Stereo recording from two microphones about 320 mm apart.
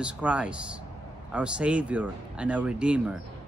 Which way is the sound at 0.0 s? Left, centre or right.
Centre.